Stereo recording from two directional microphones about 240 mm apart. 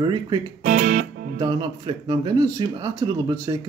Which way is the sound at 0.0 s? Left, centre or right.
Centre.